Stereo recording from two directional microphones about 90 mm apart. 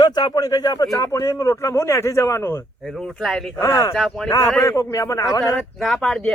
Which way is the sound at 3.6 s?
40° left (ahead or behind).